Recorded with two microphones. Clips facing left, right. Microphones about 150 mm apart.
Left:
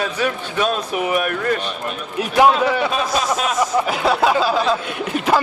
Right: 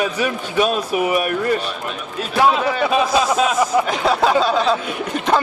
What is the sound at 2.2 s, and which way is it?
Speech, 15° left (ahead or behind).